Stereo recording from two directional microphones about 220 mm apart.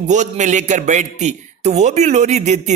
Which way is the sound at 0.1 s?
35° right (ahead or behind).